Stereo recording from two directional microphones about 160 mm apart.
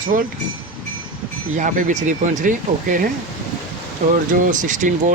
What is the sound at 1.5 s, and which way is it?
Speech, 50° right (ahead or behind).